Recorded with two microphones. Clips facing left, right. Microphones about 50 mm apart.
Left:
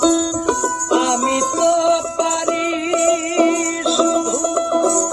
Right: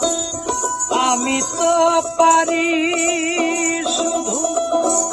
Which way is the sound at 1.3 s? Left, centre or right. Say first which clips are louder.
Left 2 dB; right.